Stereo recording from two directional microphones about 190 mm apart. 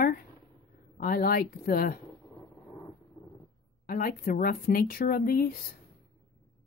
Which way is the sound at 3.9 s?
50° left (ahead or behind).